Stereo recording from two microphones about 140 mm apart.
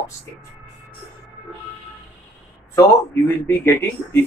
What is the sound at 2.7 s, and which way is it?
Speech, 15° left (ahead or behind).